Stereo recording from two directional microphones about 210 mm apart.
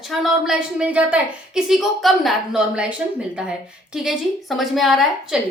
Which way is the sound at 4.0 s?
Centre (ahead or behind).